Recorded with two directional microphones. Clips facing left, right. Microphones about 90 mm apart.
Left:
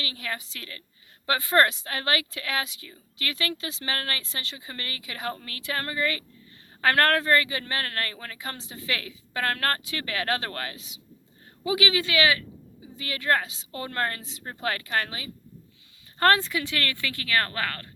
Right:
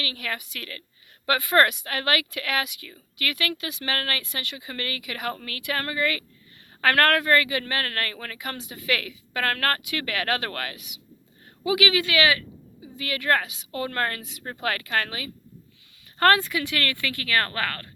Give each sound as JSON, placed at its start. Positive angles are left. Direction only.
{"t": 0.0, "sound": "speech", "side_deg": 25}